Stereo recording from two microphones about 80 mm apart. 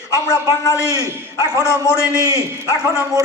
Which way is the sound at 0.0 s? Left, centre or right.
Left.